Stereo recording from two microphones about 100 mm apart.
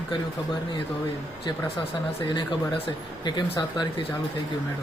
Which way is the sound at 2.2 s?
50° left (ahead or behind).